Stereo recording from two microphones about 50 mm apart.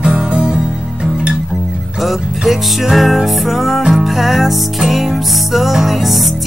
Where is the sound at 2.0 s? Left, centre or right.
Centre.